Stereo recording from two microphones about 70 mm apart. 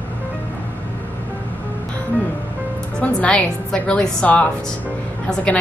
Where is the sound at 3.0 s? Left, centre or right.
Centre.